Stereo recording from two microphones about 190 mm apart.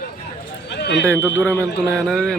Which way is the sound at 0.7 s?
60° left (ahead or behind).